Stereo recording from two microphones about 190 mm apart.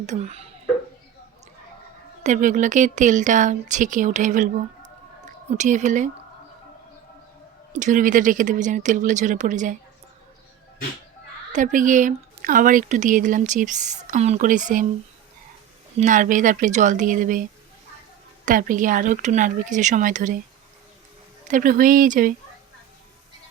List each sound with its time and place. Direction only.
0.0 s speech: 35° right (ahead or behind)
2.2 s speech: 40° right (ahead or behind)
5.5 s speech: 40° right (ahead or behind)
7.7 s speech: 40° right (ahead or behind)
11.5 s a woman's voice: 45° right (ahead or behind)
16.0 s a woman's voice: 45° right (ahead or behind)
18.4 s a woman's voice: 45° right (ahead or behind)
21.4 s a woman's voice: 45° right (ahead or behind)